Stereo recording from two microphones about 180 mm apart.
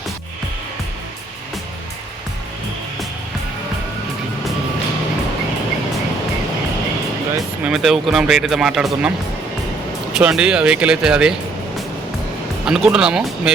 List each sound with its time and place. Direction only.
7.6 s speech: 5° right (ahead or behind)
10.2 s speech: 5° right (ahead or behind)
12.6 s speech: centre (ahead or behind)